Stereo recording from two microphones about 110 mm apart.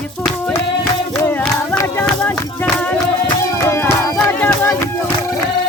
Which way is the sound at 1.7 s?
20° left (ahead or behind).